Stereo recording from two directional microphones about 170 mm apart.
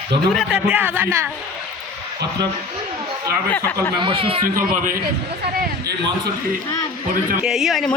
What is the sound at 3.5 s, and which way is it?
Speech, 15° left (ahead or behind).